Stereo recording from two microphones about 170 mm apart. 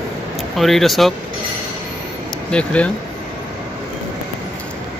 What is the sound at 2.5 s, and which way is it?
Speech, 5° left (ahead or behind).